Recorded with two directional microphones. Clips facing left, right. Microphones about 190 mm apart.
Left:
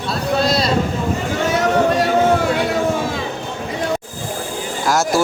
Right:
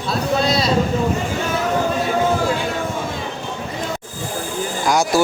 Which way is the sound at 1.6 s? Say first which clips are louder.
Left 5 dB; 75° left (ahead or behind).